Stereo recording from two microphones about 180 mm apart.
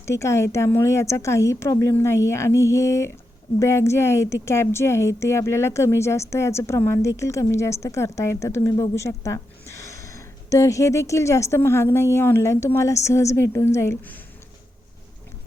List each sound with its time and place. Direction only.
0.0 s a woman's voice: 15° left (ahead or behind)